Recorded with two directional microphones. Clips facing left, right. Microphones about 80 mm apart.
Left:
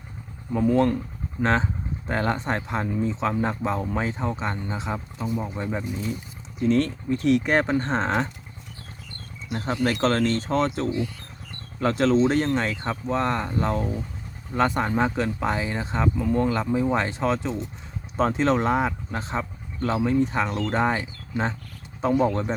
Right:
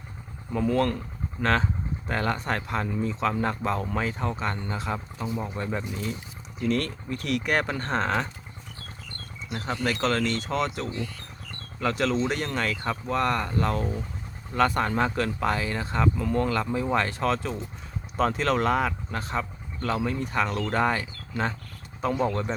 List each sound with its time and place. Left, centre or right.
0.6 s speech: centre
6.6 s speech: left
9.5 s speech: left
10.8 s speech: left
11.8 s speech: left